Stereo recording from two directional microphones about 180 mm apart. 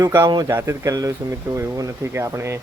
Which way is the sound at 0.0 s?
20° right (ahead or behind).